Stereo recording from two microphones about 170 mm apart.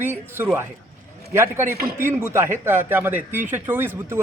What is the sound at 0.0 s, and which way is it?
A man's voice, 15° right (ahead or behind).